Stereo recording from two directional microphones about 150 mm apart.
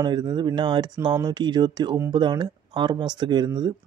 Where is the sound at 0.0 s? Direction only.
30° right (ahead or behind).